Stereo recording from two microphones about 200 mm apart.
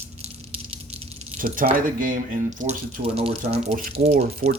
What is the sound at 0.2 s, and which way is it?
Rattle, 30° right (ahead or behind).